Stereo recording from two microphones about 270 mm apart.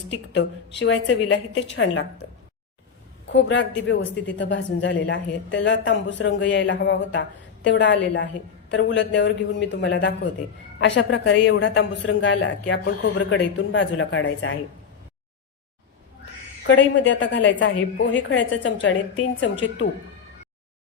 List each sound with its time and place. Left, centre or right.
0.1 s a woman's voice: left
3.2 s a man's voice: left
16.6 s a woman's voice: left